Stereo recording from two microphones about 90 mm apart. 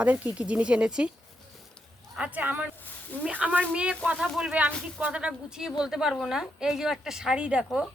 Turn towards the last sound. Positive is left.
turn(degrees=-10)  # may be behind; listen again after turning